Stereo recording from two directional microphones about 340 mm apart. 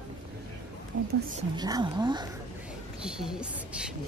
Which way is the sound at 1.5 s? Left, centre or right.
Centre.